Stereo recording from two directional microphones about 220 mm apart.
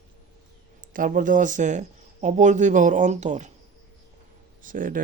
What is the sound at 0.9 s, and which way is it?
Speech, 40° right (ahead or behind).